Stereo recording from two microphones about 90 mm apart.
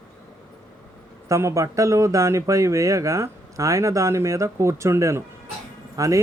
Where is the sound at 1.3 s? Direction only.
35° right (ahead or behind).